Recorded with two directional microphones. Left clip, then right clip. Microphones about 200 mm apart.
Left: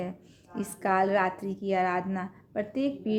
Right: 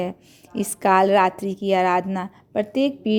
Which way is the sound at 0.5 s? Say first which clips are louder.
Right 9 dB; 40° right (ahead or behind).